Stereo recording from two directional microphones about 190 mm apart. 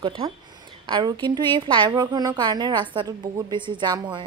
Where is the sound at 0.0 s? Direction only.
30° right (ahead or behind).